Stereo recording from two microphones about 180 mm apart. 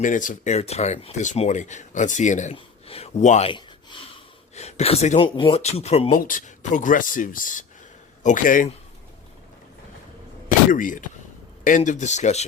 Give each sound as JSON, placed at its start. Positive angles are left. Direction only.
{"t": 0.0, "sound": "speech", "side_deg": 45}
{"t": 3.5, "sound": "gasp", "side_deg": 25}
{"t": 4.5, "sound": "speech", "side_deg": 35}
{"t": 6.1, "sound": "speech", "side_deg": 50}
{"t": 10.7, "sound": "speech", "side_deg": 50}